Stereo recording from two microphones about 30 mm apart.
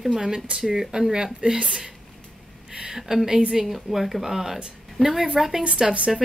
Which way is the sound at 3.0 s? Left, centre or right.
Centre.